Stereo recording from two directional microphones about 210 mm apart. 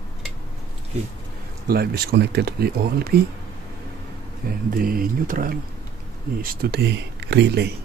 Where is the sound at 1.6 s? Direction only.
50° right (ahead or behind).